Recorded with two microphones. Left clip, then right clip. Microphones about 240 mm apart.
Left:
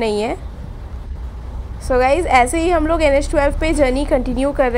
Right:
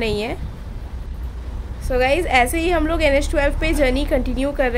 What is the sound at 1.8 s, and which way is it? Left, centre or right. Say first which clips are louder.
A woman's voice: left 4 dB; centre.